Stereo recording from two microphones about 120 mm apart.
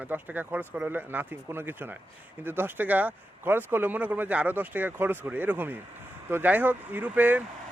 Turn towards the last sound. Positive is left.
turn(degrees=-15)  # may be behind; listen again after turning